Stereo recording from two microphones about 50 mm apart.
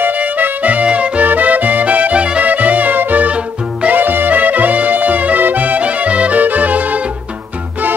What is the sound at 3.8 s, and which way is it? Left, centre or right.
Music, right.